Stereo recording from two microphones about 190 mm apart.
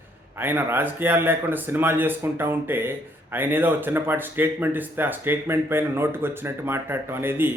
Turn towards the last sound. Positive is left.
turn(degrees=-10)  # may be behind; listen again after turning